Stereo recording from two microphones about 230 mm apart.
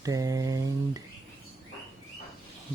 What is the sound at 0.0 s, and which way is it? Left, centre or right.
Mantra, centre.